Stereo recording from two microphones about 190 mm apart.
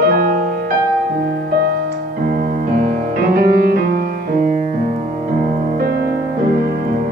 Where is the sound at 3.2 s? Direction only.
50° right (ahead or behind).